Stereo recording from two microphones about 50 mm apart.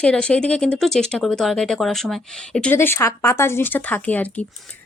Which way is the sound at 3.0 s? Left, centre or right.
Left.